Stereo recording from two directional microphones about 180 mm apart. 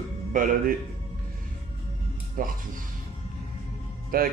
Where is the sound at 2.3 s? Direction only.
50° right (ahead or behind).